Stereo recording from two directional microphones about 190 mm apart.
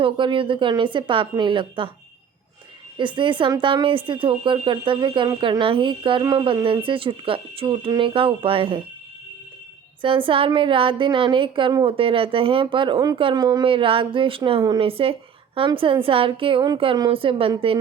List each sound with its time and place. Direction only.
0.0 s a woman's voice: 25° right (ahead or behind)
3.0 s a woman's voice: 25° right (ahead or behind)
10.0 s a woman's voice: 25° right (ahead or behind)